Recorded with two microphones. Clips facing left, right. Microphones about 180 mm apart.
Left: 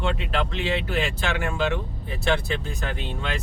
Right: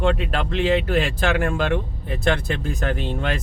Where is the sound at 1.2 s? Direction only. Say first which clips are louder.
Right 5 dB; 50° right (ahead or behind).